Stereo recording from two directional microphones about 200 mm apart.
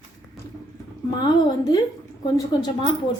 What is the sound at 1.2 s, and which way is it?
A woman's voice, 20° left (ahead or behind).